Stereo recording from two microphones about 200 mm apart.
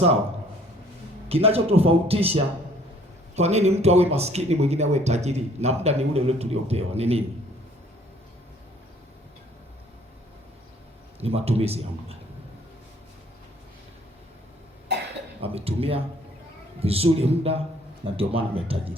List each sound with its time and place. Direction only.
1.3 s speech: 30° right (ahead or behind)
11.2 s speech: 30° right (ahead or behind)
15.4 s speech: 30° right (ahead or behind)